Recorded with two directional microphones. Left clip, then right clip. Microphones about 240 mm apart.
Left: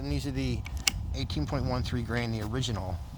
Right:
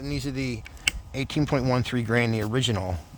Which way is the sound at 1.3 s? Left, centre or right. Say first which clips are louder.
Right 9 dB; right.